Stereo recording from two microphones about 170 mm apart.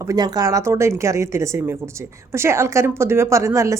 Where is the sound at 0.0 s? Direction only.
20° right (ahead or behind).